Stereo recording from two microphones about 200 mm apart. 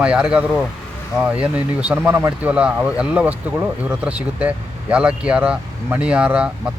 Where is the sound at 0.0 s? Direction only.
5° right (ahead or behind).